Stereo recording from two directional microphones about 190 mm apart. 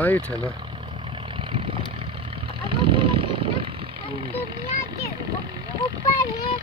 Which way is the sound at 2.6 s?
25° right (ahead or behind).